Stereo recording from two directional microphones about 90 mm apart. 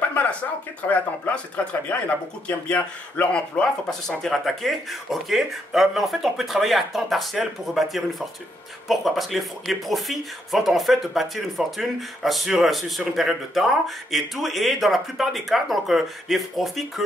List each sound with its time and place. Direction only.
0.1 s speech: 15° left (ahead or behind); by 17.0 s centre (ahead or behind)